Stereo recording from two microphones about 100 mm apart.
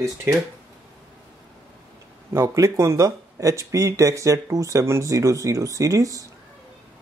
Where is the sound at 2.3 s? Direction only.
30° right (ahead or behind).